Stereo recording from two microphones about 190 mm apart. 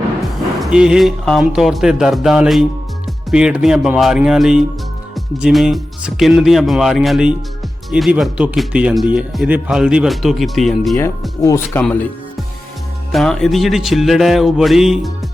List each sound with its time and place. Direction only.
0.2 s speech: centre (ahead or behind)
11.4 s speech: 15° left (ahead or behind)
13.1 s speech: centre (ahead or behind)